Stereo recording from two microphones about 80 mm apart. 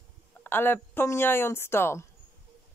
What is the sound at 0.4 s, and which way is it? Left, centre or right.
Speech, left.